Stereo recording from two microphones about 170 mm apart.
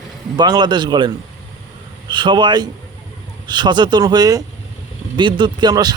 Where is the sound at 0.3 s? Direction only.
25° right (ahead or behind).